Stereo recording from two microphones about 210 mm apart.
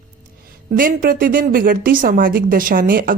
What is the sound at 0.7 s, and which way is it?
A woman's voice, 40° right (ahead or behind).